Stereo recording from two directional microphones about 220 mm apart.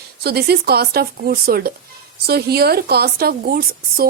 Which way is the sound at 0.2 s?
45° right (ahead or behind).